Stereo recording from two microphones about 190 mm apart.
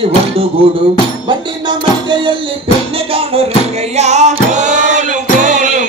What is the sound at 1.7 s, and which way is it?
Music, 25° right (ahead or behind).